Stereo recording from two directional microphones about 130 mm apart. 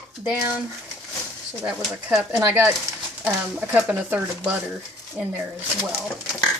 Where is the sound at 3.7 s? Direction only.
10° right (ahead or behind).